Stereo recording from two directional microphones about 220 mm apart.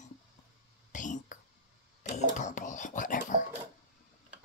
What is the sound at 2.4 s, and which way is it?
Speech, 35° left (ahead or behind).